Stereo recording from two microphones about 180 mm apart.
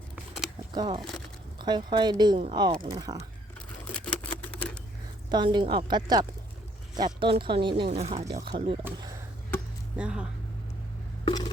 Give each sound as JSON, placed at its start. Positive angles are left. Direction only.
{"t": 0.7, "sound": "speech", "side_deg": -25}
{"t": 4.0, "sound": "typewriter", "side_deg": 5}
{"t": 5.3, "sound": "speech", "side_deg": -25}
{"t": 10.0, "sound": "speech", "side_deg": -5}
{"t": 11.3, "sound": "wood block", "side_deg": 20}